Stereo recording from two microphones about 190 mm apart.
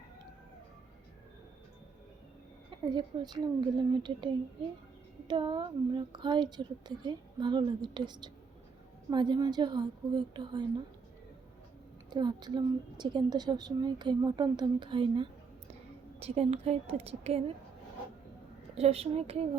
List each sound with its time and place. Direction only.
2.6 s a woman's voice: 25° right (ahead or behind)
5.3 s a woman's voice: 25° right (ahead or behind)
12.1 s a woman's voice: 20° right (ahead or behind)
18.7 s a woman's voice: 30° right (ahead or behind)